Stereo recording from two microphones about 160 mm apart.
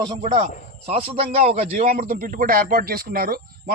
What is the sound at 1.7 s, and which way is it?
Speech, 65° right (ahead or behind).